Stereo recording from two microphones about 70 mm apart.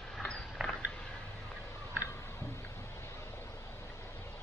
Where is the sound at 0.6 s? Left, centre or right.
Centre.